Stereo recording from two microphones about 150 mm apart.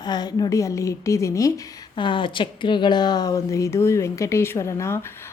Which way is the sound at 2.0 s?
35° left (ahead or behind).